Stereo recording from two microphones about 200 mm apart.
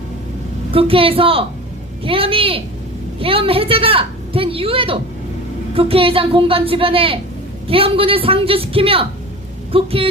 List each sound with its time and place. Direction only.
0.7 s a woman's voice: 25° right (ahead or behind)